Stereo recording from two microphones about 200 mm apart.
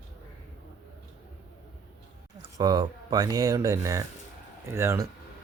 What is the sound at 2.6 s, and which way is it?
Speech, 20° right (ahead or behind).